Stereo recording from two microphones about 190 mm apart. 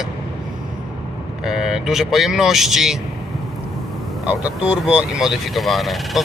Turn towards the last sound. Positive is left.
turn(degrees=0)  # may be behind; listen again after turning